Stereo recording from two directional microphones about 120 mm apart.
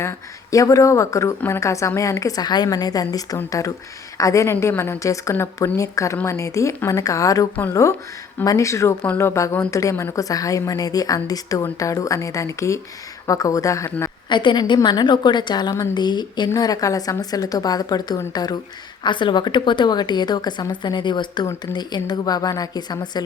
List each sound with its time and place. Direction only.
0.5 s a woman's voice: 25° left (ahead or behind)
14.3 s a woman's voice: 40° left (ahead or behind)